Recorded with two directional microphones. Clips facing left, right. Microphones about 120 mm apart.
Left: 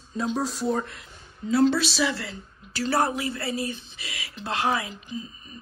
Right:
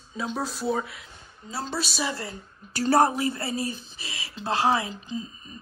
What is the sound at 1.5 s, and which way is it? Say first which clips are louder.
A woman's voice: left 11 dB; 35° right (ahead or behind).